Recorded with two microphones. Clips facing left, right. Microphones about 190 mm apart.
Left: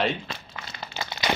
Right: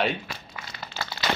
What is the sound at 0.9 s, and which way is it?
Crumpling, 15° left (ahead or behind).